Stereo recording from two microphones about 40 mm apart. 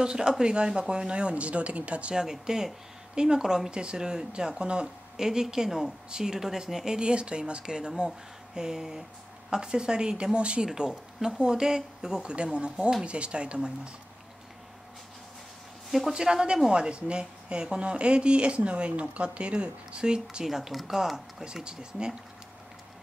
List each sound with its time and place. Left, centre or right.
0.0 s speech: right
2.1 s speech: centre
5.1 s speech: centre
7.0 s speech: right
16.1 s speech: centre
20.4 s speech: centre